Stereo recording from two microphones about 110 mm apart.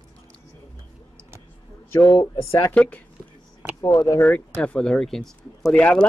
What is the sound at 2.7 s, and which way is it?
Speech, 10° left (ahead or behind).